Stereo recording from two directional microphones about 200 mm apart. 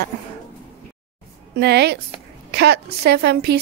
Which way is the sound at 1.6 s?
55° right (ahead or behind).